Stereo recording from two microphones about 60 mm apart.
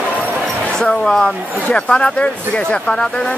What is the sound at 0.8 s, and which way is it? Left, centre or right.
Speech, centre.